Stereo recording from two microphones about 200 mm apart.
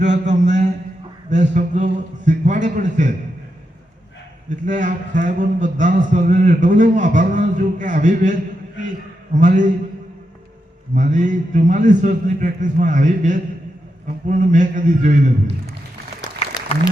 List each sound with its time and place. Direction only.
0.0 s a sound: 35° right (ahead or behind)
1.3 s a man's voice: 35° right (ahead or behind)
4.4 s a man's voice: 40° right (ahead or behind)
10.9 s a man's voice: 40° right (ahead or behind)